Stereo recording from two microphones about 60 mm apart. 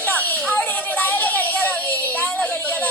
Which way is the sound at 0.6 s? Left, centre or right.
Left.